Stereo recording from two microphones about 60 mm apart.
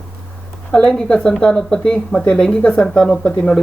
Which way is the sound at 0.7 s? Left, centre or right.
Centre.